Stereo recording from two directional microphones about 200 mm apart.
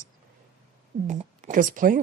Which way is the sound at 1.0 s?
35° right (ahead or behind).